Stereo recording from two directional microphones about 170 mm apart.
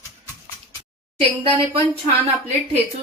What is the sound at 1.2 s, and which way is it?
Speech, 35° right (ahead or behind).